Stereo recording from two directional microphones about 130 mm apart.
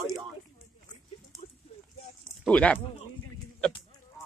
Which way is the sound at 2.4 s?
10° left (ahead or behind).